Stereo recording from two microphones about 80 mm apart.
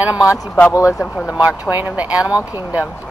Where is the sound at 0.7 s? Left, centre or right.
Left.